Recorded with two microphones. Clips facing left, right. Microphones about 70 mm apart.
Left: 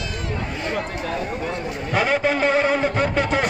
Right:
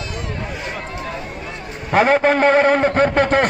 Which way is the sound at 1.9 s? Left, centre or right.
Right.